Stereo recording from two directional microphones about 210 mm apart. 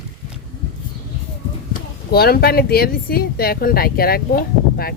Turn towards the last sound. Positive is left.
turn(degrees=45)  # may be behind; listen again after turning